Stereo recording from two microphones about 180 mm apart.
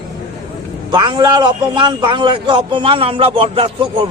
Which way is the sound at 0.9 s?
25° right (ahead or behind).